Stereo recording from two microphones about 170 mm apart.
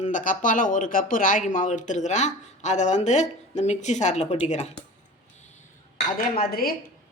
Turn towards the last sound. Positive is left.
turn(degrees=60)  # may be behind; listen again after turning